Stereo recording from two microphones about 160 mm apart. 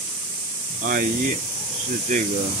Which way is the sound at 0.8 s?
55° right (ahead or behind).